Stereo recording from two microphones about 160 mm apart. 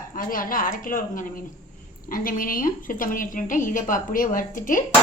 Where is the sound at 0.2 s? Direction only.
60° left (ahead or behind).